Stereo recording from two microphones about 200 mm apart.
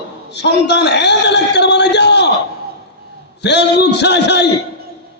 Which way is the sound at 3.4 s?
60° left (ahead or behind).